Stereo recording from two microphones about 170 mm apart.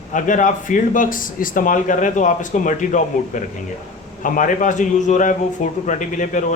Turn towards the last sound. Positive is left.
turn(degrees=50)  # may be behind; listen again after turning